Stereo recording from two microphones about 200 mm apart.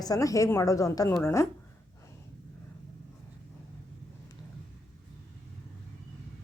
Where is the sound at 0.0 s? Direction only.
20° left (ahead or behind).